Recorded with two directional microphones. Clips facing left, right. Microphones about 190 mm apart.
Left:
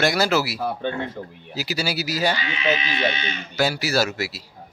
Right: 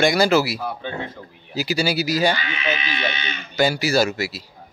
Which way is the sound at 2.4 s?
30° left (ahead or behind).